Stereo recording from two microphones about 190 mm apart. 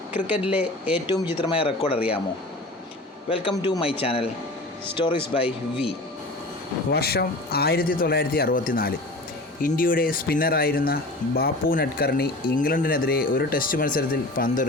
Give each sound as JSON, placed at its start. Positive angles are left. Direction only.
{"t": 0.9, "sound": "speech", "side_deg": 25}
{"t": 3.2, "sound": "speech", "side_deg": 30}
{"t": 6.9, "sound": "speech", "side_deg": 55}